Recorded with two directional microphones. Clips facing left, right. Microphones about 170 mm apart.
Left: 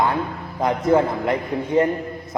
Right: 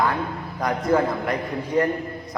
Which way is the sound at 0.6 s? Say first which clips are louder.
Left 3 dB; 25° left (ahead or behind).